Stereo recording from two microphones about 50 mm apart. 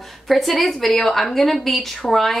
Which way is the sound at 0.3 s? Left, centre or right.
Centre.